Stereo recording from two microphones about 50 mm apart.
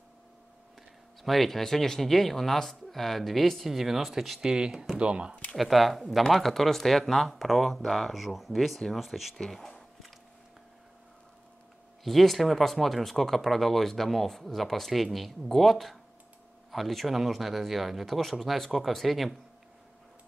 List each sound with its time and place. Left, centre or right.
1.2 s speech: centre
4.5 s speech: centre
5.6 s speech: centre
12.0 s speech: centre